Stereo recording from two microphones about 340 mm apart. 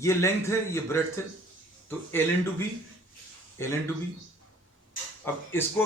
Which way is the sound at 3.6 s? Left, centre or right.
Centre.